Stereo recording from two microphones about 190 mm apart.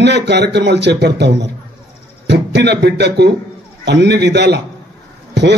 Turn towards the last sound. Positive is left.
turn(degrees=-65)  # may be behind; listen again after turning